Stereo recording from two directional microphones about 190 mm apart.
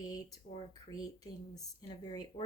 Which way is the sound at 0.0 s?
20° left (ahead or behind).